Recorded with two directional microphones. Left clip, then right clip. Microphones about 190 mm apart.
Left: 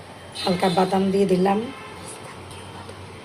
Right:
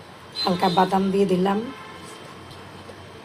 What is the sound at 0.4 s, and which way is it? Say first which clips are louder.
Speech: right 1 dB; 25° right (ahead or behind).